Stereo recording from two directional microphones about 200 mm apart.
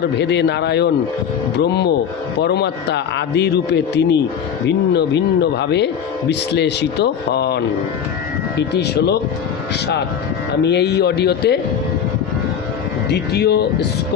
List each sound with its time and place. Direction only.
0.2 s a man's voice: 60° left (ahead or behind)
10.6 s a man's voice: 55° left (ahead or behind)
13.1 s a man's voice: 55° left (ahead or behind)